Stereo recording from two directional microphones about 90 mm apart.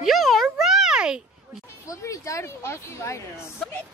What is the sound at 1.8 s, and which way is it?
Speech, 35° left (ahead or behind).